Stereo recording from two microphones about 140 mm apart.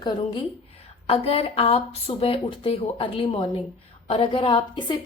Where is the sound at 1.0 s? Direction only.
45° left (ahead or behind).